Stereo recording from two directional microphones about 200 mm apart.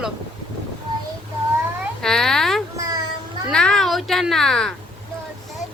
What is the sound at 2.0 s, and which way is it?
Speech, 5° left (ahead or behind).